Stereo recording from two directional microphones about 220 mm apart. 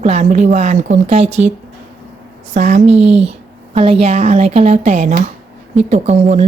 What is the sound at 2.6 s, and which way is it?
Speech, 35° right (ahead or behind).